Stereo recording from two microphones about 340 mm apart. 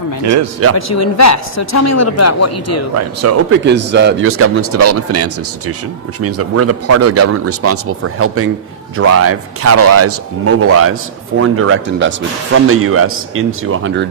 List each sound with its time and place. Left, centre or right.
0.8 s speech: left
2.9 s speech: right
3.5 s speech: right